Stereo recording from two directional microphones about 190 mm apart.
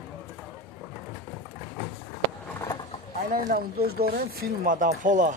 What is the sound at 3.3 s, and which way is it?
Speech, 50° right (ahead or behind).